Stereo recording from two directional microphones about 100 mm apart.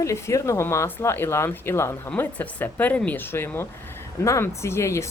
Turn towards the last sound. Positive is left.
turn(degrees=30)  # may be behind; listen again after turning